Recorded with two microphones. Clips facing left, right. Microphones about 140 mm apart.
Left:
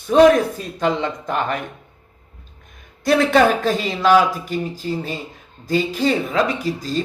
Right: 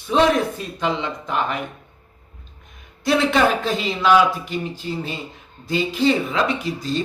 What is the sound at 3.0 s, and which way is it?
Speech, 50° left (ahead or behind).